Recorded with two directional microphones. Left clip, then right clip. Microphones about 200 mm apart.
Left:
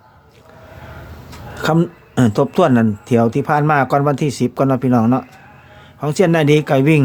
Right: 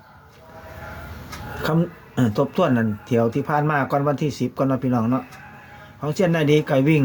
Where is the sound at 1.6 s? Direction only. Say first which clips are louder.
Left 7 dB; 45° left (ahead or behind).